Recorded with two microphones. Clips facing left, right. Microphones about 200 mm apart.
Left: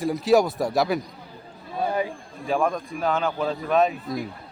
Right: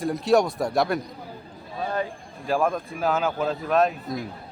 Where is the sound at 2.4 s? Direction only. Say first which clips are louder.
Even; centre (ahead or behind).